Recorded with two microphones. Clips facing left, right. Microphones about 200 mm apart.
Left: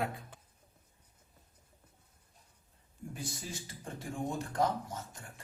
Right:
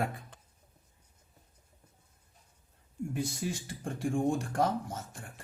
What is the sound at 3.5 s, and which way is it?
Speech, 60° right (ahead or behind).